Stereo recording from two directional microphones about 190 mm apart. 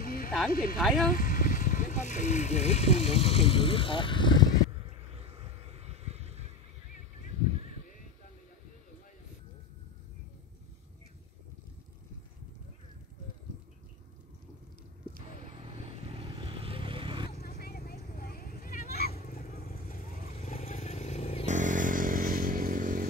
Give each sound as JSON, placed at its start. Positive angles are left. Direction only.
{"t": 0.0, "sound": "a sound", "side_deg": 50}
{"t": 0.5, "sound": "speech", "side_deg": 50}
{"t": 0.7, "sound": "speech", "side_deg": 0}
{"t": 1.1, "sound": "speech", "side_deg": 45}
{"t": 5.1, "sound": "vehicle", "side_deg": -30}
{"t": 16.2, "sound": "vehicle", "side_deg": -30}
{"t": 17.4, "sound": "a sound", "side_deg": 55}
{"t": 21.5, "sound": "motorcycle", "side_deg": -40}